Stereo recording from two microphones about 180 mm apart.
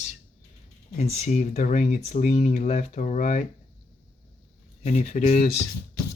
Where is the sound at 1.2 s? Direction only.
40° left (ahead or behind).